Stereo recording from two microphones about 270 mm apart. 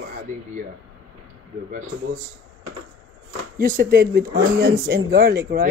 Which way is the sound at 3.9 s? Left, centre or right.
Right.